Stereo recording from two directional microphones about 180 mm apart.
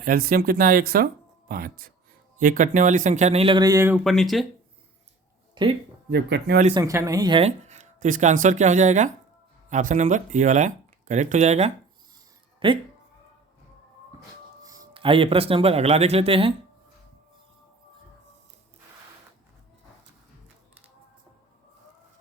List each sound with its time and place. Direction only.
0.0 s speech: 55° right (ahead or behind); by 3.9 s 20° right (ahead or behind)
3.9 s speech: centre (ahead or behind)
5.6 s speech: 25° right (ahead or behind)
6.1 s speech: 65° right (ahead or behind)
6.7 s speech: 15° right (ahead or behind); by 11.7 s 40° right (ahead or behind)
12.5 s a sound: 30° right (ahead or behind)
14.6 s speech: 20° right (ahead or behind)